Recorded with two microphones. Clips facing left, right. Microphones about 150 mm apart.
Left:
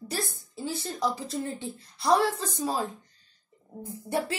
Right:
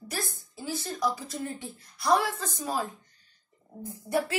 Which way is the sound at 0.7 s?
30° left (ahead or behind).